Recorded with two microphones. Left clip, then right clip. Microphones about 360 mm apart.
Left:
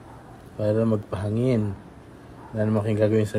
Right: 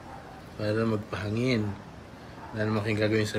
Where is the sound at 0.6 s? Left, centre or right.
Centre.